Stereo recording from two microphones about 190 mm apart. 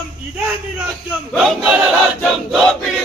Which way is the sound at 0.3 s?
5° right (ahead or behind).